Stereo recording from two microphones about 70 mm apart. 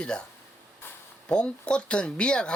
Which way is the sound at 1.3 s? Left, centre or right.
Centre.